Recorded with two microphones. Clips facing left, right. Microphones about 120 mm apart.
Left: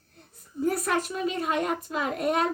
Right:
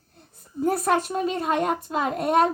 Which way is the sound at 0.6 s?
35° right (ahead or behind).